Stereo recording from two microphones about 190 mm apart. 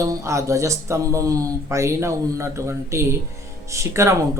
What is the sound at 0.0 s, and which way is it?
Speech, 15° right (ahead or behind).